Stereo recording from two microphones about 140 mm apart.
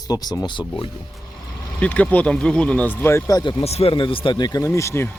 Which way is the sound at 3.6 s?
45° left (ahead or behind).